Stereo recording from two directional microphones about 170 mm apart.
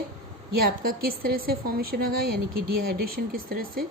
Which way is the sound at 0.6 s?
60° right (ahead or behind).